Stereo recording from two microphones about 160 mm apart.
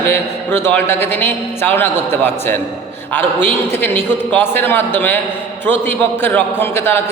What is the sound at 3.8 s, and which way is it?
A man's voice, 15° left (ahead or behind).